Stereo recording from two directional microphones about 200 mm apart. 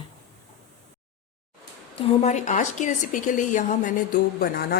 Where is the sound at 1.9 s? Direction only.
35° left (ahead or behind).